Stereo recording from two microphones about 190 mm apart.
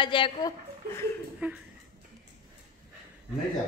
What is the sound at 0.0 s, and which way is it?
A woman's voice, 25° left (ahead or behind).